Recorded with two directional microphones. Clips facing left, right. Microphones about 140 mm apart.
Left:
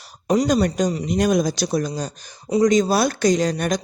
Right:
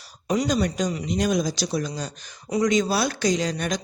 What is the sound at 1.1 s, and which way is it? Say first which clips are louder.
Speech: left 4 dB; 55° left (ahead or behind).